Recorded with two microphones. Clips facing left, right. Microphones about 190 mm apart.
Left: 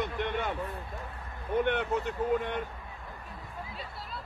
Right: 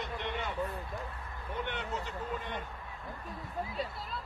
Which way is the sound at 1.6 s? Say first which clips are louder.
Left 10 dB; 60° left (ahead or behind).